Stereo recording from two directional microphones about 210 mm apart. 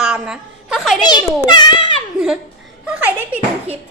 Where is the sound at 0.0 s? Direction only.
5° right (ahead or behind).